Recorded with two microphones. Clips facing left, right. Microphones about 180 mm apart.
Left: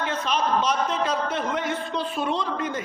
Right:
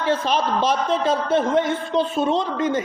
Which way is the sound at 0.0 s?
30° right (ahead or behind).